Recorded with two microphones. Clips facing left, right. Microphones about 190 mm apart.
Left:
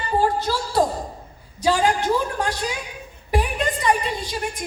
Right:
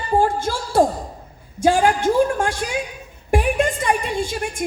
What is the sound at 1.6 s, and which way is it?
A woman's voice, 50° right (ahead or behind).